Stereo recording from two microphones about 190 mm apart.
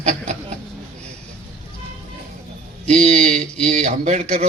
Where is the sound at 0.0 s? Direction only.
35° right (ahead or behind).